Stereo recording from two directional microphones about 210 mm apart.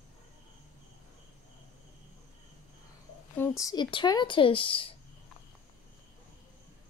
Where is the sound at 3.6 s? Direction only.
20° left (ahead or behind).